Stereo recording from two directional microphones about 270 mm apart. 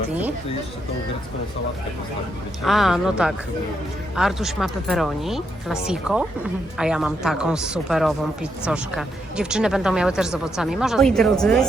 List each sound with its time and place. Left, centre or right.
2.6 s a woman's voice: centre